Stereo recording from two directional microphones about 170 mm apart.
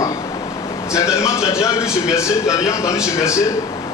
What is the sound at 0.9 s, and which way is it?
A man's voice, 15° left (ahead or behind).